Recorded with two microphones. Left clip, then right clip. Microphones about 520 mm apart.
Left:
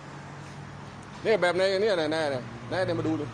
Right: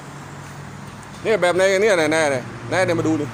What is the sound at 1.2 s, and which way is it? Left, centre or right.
Speech, left.